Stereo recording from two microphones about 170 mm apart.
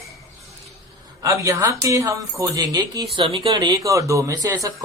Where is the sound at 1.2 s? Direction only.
20° right (ahead or behind).